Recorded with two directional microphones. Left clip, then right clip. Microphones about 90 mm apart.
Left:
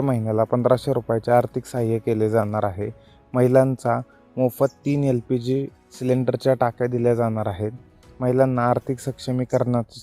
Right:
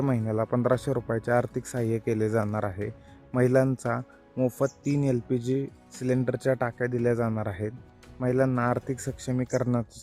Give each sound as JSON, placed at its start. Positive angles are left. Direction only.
{"t": 0.1, "sound": "speech", "side_deg": 20}